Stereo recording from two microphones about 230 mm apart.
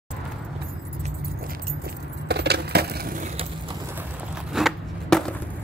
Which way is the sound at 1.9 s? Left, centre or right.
Right.